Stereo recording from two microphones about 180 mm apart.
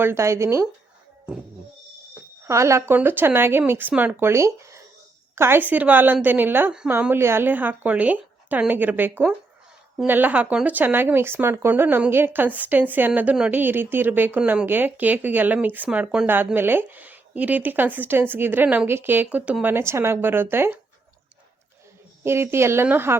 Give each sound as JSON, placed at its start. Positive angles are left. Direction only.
{"t": 0.0, "sound": "speech", "side_deg": -15}
{"t": 2.5, "sound": "speech", "side_deg": -15}
{"t": 22.2, "sound": "speech", "side_deg": -15}